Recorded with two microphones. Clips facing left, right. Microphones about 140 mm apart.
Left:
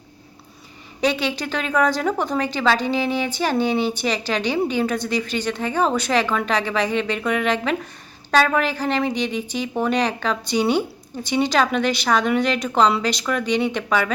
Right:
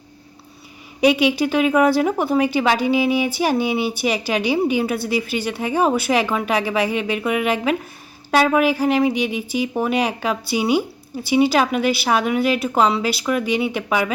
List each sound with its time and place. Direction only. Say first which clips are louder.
1.0 s speech: right 6 dB; 10° right (ahead or behind)